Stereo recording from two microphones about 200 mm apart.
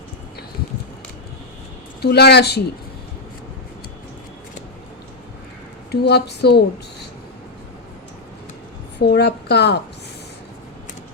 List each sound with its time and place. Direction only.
2.0 s a woman's voice: 55° left (ahead or behind)
5.9 s a woman's voice: 55° left (ahead or behind)
9.0 s a woman's voice: 55° left (ahead or behind)